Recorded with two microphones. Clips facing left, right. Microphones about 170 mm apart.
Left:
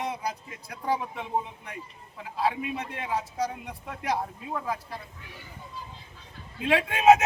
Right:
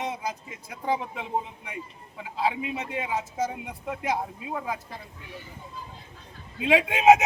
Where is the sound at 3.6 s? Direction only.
5° right (ahead or behind).